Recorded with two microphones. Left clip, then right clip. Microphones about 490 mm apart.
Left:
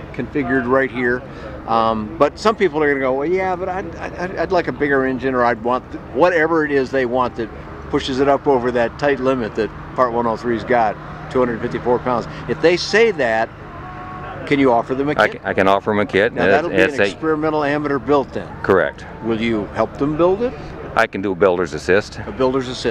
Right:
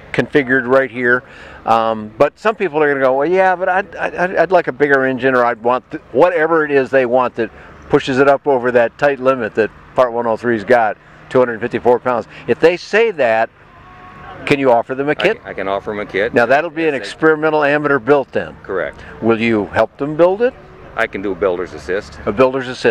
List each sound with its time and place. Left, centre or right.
0.1 s speech: right
14.5 s speech: right
15.1 s speech: left
17.2 s speech: right
18.6 s speech: left
19.2 s speech: centre
20.9 s speech: left
22.4 s speech: right